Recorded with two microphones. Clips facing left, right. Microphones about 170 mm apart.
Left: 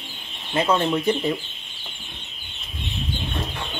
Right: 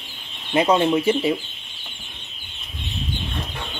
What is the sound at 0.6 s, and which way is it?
Speech, 15° right (ahead or behind).